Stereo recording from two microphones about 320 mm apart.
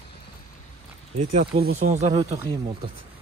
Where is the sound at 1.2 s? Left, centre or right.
Centre.